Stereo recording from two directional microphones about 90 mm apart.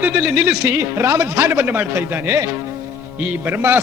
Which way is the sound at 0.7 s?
30° right (ahead or behind).